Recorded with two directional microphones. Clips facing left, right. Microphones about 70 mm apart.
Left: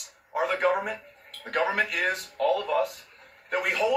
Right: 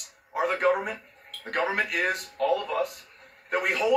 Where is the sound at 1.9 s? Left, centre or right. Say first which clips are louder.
Even; centre.